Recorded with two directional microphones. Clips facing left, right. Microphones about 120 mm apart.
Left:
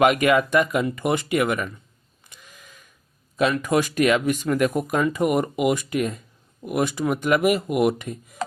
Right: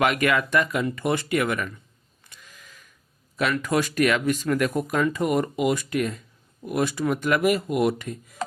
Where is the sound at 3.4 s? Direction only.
20° left (ahead or behind).